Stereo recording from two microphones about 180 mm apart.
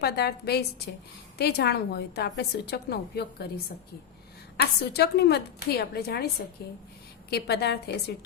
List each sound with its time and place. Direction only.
0.0 s a woman's voice: 60° left (ahead or behind)
4.5 s a woman's voice: 65° left (ahead or behind)
7.3 s a woman's voice: 65° left (ahead or behind)